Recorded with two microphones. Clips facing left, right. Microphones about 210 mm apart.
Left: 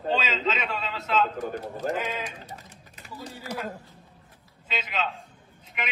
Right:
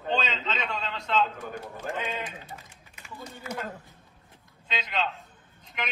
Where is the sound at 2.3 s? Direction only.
35° left (ahead or behind).